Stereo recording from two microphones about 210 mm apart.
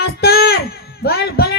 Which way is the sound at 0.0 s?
50° left (ahead or behind).